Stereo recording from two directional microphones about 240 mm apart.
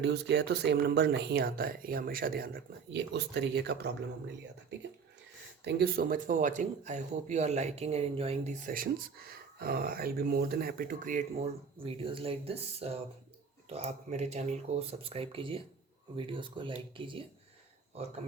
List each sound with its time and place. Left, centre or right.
0.0 s speech: right
5.6 s speech: right